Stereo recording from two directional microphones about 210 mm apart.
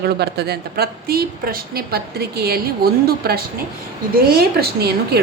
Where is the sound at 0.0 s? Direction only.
50° right (ahead or behind).